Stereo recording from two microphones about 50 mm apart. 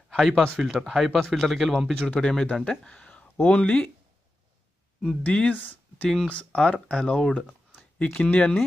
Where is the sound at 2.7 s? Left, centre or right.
Left.